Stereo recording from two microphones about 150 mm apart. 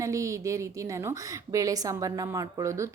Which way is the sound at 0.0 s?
20° right (ahead or behind).